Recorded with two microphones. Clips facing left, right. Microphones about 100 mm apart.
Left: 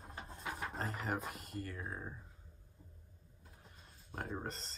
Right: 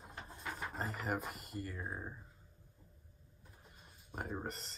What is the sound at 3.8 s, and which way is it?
Speech, 5° right (ahead or behind).